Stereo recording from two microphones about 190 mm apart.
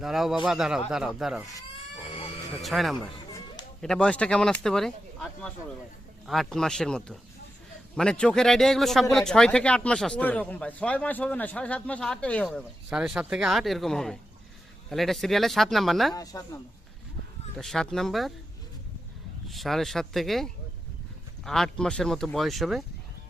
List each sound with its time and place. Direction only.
0.0 s speech: centre (ahead or behind)
2.6 s speech: centre (ahead or behind)
16.1 s speech: 20° left (ahead or behind)
17.6 s speech: centre (ahead or behind)
19.5 s speech: centre (ahead or behind)